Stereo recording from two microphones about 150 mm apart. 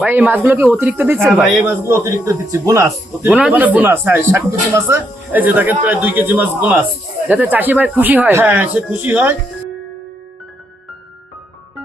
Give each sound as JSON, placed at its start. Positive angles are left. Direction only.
{"t": 0.0, "sound": "speech", "side_deg": -15}
{"t": 3.3, "sound": "speech", "side_deg": -10}